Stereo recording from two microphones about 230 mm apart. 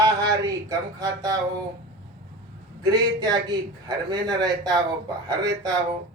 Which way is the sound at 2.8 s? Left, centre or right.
Centre.